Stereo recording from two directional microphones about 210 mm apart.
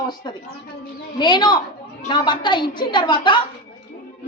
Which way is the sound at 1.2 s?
20° left (ahead or behind).